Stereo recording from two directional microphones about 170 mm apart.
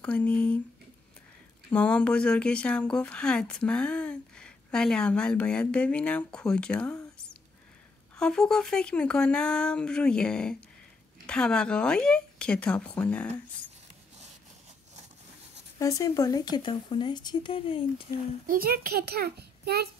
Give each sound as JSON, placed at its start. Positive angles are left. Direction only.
{"t": 0.0, "sound": "speech", "side_deg": 10}
{"t": 1.7, "sound": "speech", "side_deg": 5}
{"t": 8.2, "sound": "speech", "side_deg": 5}
{"t": 15.8, "sound": "speech", "side_deg": 20}
{"t": 18.5, "sound": "a child's voice", "side_deg": -60}